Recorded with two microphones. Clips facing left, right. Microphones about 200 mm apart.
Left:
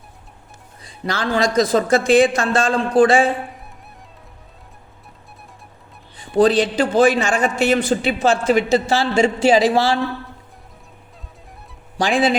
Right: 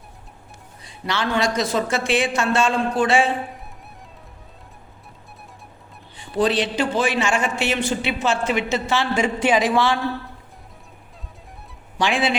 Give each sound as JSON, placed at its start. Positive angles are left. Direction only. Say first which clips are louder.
{"t": 1.0, "sound": "a man's voice", "louder": "left 2 dB", "side_deg": 35}
{"t": 6.3, "sound": "a man's voice", "louder": "left 6 dB", "side_deg": 40}
{"t": 11.9, "sound": "a man's voice", "louder": "left 4 dB", "side_deg": 35}